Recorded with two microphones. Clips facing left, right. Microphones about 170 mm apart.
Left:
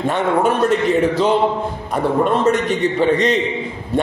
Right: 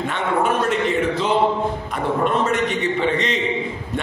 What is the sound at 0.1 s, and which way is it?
Speech, 40° left (ahead or behind).